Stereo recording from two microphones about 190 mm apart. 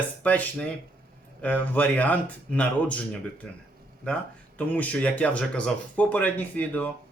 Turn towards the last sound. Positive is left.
turn(degrees=10)  # may be behind; listen again after turning